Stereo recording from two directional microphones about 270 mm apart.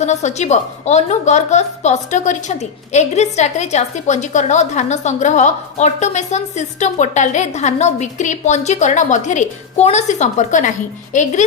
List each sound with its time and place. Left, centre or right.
0.0 s a woman's voice: left